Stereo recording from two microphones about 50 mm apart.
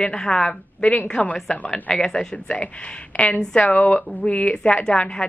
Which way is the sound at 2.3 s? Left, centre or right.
Left.